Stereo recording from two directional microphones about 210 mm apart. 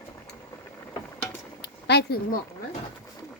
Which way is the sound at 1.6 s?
50° left (ahead or behind).